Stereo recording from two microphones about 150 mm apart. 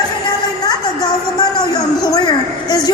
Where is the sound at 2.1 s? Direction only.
25° left (ahead or behind).